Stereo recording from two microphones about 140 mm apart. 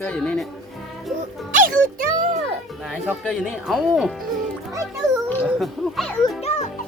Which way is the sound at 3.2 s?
Centre (ahead or behind).